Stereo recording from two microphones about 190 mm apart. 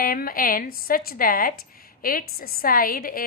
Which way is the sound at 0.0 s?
50° left (ahead or behind).